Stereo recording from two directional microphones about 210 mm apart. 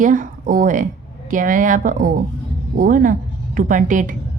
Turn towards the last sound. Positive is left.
turn(degrees=-40)  # may be behind; listen again after turning